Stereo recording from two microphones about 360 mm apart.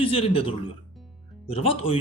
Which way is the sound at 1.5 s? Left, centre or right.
Centre.